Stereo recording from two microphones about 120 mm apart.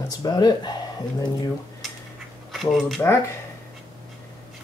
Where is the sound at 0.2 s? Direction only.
35° left (ahead or behind).